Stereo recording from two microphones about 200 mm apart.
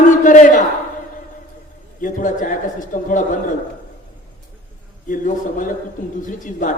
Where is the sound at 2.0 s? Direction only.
40° left (ahead or behind).